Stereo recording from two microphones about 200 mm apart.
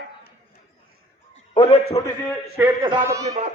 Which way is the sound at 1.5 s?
30° left (ahead or behind).